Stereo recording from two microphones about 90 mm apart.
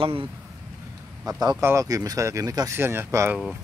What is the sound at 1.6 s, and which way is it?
Speech, 35° right (ahead or behind).